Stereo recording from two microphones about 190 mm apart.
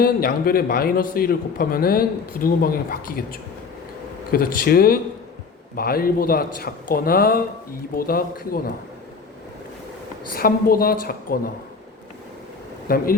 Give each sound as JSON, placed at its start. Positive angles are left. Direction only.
{"t": 0.0, "sound": "a man's voice", "side_deg": 50}
{"t": 4.3, "sound": "a man's voice", "side_deg": 50}
{"t": 10.3, "sound": "a man's voice", "side_deg": 50}
{"t": 12.9, "sound": "a man's voice", "side_deg": 50}